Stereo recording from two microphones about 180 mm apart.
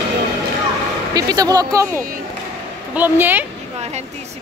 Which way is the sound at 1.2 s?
20° right (ahead or behind).